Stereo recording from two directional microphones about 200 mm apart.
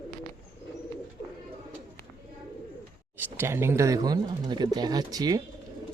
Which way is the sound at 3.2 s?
10° right (ahead or behind).